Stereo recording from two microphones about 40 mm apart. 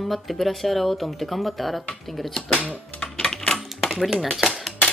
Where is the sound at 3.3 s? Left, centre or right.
Centre.